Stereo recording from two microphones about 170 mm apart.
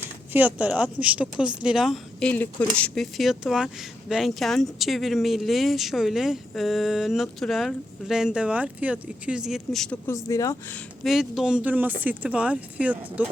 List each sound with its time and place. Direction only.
0.3 s speech: 10° right (ahead or behind)
2.3 s speech: 10° left (ahead or behind)
10.2 s speech: 20° left (ahead or behind)
11.0 s speech: centre (ahead or behind)